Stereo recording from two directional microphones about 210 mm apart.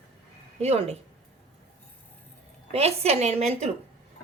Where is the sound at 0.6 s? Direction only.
30° right (ahead or behind).